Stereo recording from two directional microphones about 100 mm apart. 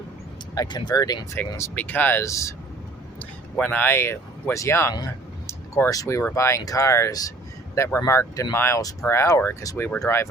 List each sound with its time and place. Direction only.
0.5 s speech: 40° left (ahead or behind)
1.7 s speech: 15° left (ahead or behind)
2.2 s speech: 30° left (ahead or behind)
3.5 s speech: 15° left (ahead or behind)
5.5 s a sound: 30° left (ahead or behind)
6.3 s speech: 30° left (ahead or behind)
7.9 s speech: 25° left (ahead or behind)